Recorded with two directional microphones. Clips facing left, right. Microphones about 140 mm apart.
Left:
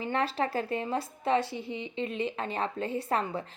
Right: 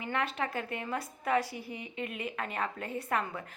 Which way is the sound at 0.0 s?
30° left (ahead or behind).